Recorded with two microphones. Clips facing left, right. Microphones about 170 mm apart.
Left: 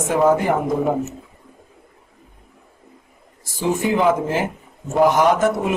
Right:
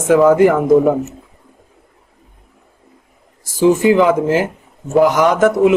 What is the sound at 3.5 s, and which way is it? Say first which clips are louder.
A man's voice: right 8 dB; 90° right.